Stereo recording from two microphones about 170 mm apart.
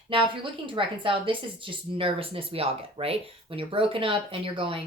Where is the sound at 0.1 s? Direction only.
30° right (ahead or behind).